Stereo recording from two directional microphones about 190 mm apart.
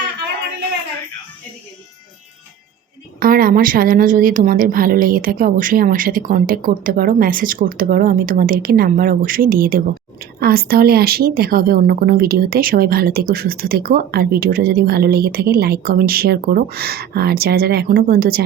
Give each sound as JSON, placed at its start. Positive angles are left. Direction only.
{"t": 3.2, "sound": "speech", "side_deg": -50}